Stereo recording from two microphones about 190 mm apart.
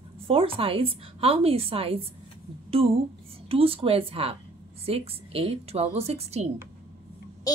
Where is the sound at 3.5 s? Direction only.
30° right (ahead or behind).